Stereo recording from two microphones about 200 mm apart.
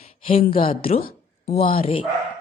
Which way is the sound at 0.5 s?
25° left (ahead or behind).